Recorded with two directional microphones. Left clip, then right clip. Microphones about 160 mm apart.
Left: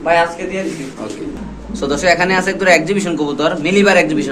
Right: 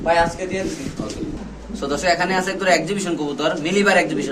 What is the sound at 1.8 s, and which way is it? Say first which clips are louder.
A man's voice: left 6 dB; 15° left (ahead or behind).